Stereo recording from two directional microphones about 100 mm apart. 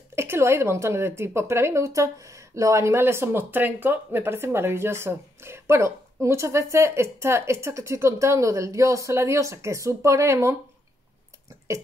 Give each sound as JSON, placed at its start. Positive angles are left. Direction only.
{"t": 0.1, "sound": "a woman's voice", "side_deg": -25}